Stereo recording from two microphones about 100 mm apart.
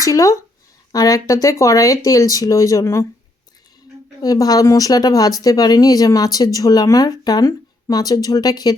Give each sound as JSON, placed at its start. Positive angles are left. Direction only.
{"t": 0.0, "sound": "speech", "side_deg": 35}
{"t": 4.2, "sound": "speech", "side_deg": 40}